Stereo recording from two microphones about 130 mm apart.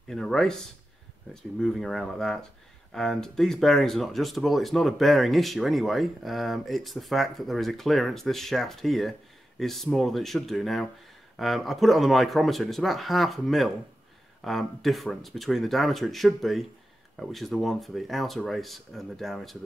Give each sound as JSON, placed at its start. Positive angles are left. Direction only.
{"t": 0.1, "sound": "speech", "side_deg": 5}